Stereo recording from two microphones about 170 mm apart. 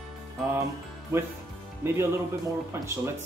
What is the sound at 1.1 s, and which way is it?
Speech, 15° right (ahead or behind).